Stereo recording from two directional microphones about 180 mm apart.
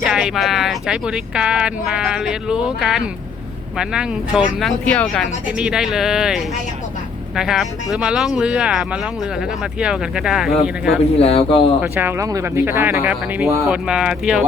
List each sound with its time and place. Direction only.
0.0 s speech: 5° right (ahead or behind)
11.2 s speech: 35° left (ahead or behind)
11.8 s speech: 10° right (ahead or behind)